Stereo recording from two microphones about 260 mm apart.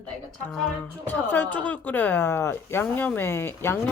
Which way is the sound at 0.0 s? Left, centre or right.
Centre.